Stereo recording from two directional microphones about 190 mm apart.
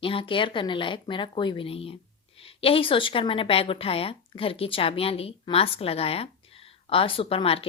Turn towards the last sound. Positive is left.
turn(degrees=30)  # may be behind; listen again after turning